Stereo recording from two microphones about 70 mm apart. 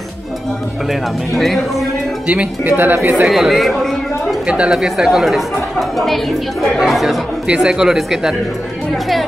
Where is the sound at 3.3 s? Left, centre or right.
Centre.